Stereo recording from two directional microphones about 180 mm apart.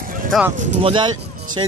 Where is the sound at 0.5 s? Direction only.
40° right (ahead or behind).